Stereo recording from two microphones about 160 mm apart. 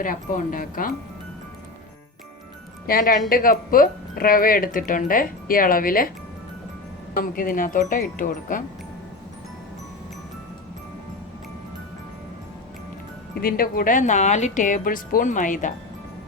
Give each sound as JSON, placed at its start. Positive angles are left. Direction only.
{"t": 0.0, "sound": "speech", "side_deg": 55}
{"t": 2.8, "sound": "speech", "side_deg": 65}
{"t": 7.2, "sound": "speech", "side_deg": 60}
{"t": 13.3, "sound": "speech", "side_deg": 65}